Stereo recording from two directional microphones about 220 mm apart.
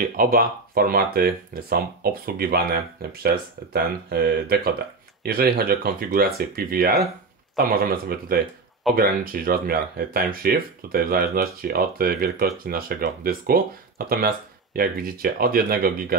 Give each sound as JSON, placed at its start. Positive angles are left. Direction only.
{"t": 0.0, "sound": "speech", "side_deg": -40}